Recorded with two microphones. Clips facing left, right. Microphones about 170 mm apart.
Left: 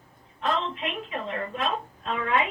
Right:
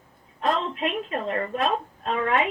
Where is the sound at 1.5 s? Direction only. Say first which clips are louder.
Right 4 dB; 45° right (ahead or behind).